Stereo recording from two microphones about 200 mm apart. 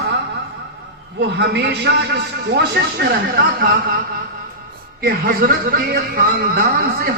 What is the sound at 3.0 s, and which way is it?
Speech, 50° right (ahead or behind).